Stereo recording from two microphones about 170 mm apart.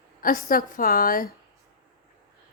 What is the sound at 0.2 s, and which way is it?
A woman's voice, 55° left (ahead or behind).